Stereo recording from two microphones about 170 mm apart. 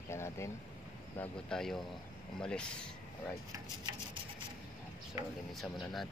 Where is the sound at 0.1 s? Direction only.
15° left (ahead or behind).